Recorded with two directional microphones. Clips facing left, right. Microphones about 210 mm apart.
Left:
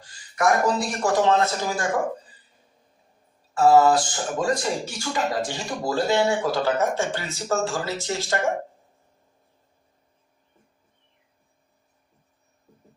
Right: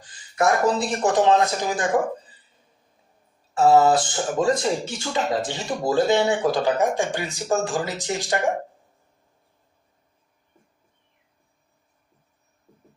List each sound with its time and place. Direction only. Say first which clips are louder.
0.0 s speech: right 1 dB; 20° right (ahead or behind)
3.7 s speech: even; 20° right (ahead or behind)